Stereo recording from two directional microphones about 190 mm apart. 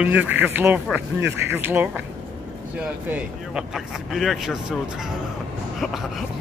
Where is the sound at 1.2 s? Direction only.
70° right (ahead or behind).